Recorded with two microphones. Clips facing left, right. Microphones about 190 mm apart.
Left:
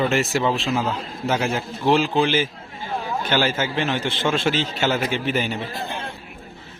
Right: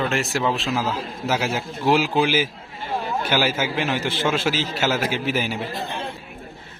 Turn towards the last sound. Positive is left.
turn(degrees=-5)  # may be behind; listen again after turning